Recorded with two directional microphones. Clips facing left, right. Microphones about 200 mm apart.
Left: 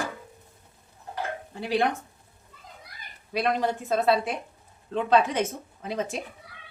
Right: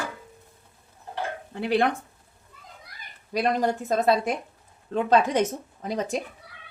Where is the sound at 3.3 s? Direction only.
40° right (ahead or behind).